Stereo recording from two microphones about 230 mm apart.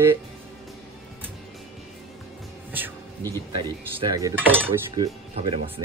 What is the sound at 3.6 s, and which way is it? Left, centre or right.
Speech, centre.